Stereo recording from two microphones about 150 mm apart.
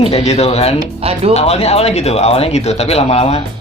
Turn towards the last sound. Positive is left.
turn(degrees=45)  # may be behind; listen again after turning